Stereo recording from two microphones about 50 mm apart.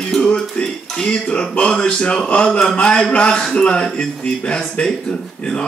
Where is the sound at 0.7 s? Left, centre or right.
Centre.